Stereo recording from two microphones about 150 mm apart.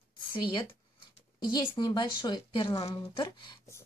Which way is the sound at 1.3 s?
30° left (ahead or behind).